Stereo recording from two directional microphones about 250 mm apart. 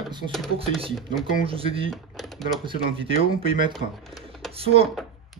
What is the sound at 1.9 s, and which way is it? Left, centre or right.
Speech, centre.